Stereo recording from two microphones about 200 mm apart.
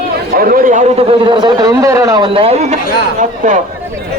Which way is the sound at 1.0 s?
25° right (ahead or behind).